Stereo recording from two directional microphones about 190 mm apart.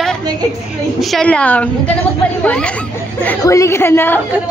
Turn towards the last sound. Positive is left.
turn(degrees=10)  # may be behind; listen again after turning